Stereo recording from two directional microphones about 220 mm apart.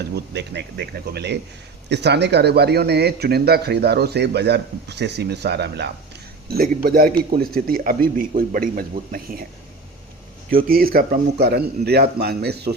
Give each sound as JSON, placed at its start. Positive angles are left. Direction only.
{"t": 0.0, "sound": "speech", "side_deg": -50}
{"t": 10.7, "sound": "speech", "side_deg": -40}